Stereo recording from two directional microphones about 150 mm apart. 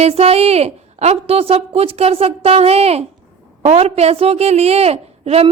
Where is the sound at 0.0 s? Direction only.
40° right (ahead or behind).